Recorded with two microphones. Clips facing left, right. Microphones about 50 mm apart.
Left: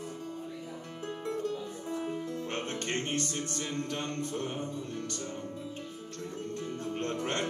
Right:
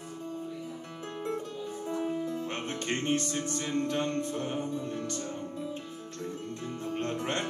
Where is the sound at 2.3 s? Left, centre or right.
Right.